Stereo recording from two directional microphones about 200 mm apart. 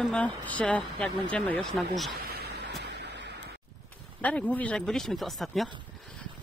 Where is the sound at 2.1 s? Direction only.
50° right (ahead or behind).